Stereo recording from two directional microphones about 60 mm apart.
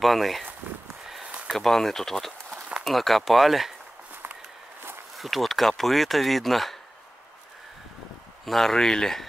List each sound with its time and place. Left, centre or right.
0.0 s speech: centre
1.0 s a sound: centre
1.6 s speech: centre
4.1 s walk: right
5.1 s speech: centre
8.5 s speech: centre